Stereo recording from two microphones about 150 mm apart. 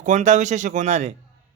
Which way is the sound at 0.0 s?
55° right (ahead or behind).